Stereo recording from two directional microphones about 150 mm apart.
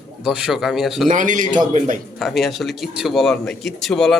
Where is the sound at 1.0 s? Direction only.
60° right (ahead or behind).